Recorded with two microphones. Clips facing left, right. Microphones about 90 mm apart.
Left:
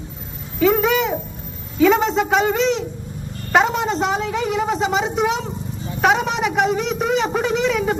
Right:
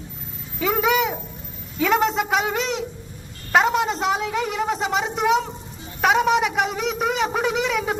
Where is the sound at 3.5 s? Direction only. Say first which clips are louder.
Left 1 dB; centre (ahead or behind).